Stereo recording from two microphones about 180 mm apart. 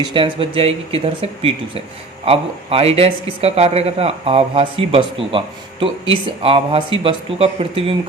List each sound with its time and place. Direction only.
0.0 s speech: 30° right (ahead or behind)